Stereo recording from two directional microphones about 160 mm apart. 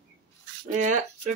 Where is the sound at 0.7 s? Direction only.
50° right (ahead or behind).